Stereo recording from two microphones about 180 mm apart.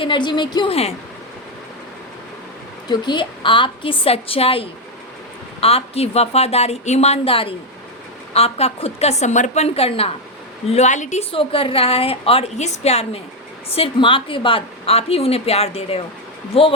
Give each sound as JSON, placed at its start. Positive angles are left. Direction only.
{"t": 0.0, "sound": "a woman's voice", "side_deg": 25}
{"t": 2.9, "sound": "a woman's voice", "side_deg": 25}